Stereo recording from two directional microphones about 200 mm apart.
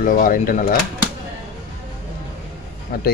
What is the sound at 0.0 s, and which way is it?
Speech, 45° left (ahead or behind).